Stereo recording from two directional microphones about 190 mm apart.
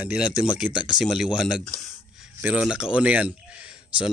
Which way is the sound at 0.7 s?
25° left (ahead or behind).